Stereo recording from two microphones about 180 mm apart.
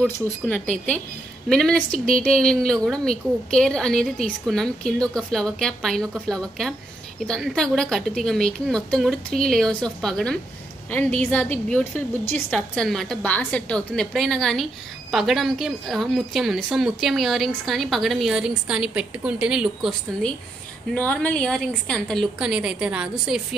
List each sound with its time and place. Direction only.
0.0 s a woman's voice: 10° left (ahead or behind)